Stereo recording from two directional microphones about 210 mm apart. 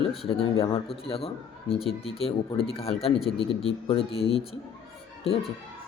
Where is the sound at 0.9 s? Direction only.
25° left (ahead or behind).